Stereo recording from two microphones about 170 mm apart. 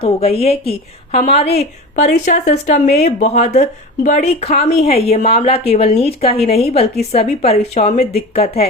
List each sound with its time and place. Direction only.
0.0 s a woman's voice: 35° left (ahead or behind)
6.3 s speech: 65° left (ahead or behind)
6.6 s a woman's voice: 35° left (ahead or behind)